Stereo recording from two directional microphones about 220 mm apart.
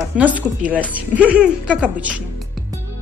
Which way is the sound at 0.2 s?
5° right (ahead or behind).